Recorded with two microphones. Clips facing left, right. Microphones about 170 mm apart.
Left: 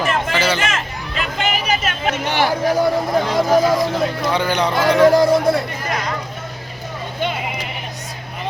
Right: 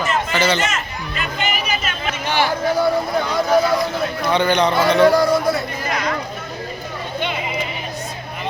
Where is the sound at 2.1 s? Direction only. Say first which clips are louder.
Right 1 dB; 55° left (ahead or behind).